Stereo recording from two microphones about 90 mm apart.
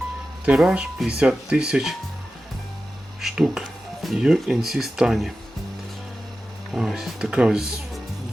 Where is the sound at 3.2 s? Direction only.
5° right (ahead or behind).